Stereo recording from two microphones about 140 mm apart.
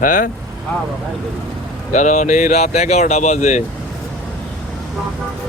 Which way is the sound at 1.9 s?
60° left (ahead or behind).